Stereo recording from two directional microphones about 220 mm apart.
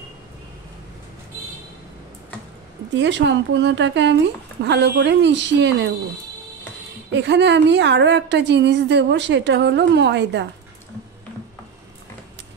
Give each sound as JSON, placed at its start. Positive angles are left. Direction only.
{"t": 2.9, "sound": "a woman's voice", "side_deg": -55}
{"t": 7.1, "sound": "a woman's voice", "side_deg": -50}